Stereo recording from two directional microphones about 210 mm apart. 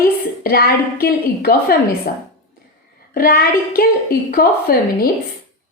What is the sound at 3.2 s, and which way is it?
A woman's voice, 45° left (ahead or behind).